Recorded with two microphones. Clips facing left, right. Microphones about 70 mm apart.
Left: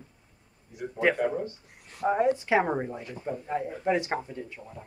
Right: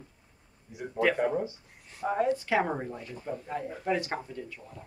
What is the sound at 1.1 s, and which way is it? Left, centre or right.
Speech, centre.